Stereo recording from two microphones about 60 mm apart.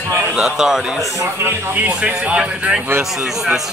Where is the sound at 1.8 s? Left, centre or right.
Right.